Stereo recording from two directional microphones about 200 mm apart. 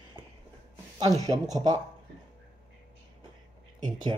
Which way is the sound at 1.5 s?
20° right (ahead or behind).